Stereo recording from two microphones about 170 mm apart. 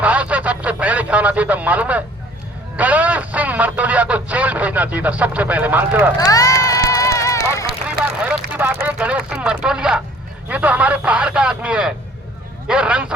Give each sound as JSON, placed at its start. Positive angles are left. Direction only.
{"t": 0.0, "sound": "radio", "side_deg": -10}
{"t": 2.7, "sound": "speech", "side_deg": -10}
{"t": 6.1, "sound": "run", "side_deg": 20}
{"t": 7.9, "sound": "speech", "side_deg": -10}